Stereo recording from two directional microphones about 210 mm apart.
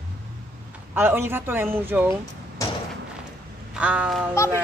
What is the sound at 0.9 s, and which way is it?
A woman's voice, 10° right (ahead or behind).